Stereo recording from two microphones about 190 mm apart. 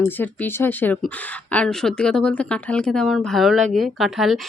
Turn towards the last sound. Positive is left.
turn(degrees=0)  # may be behind; listen again after turning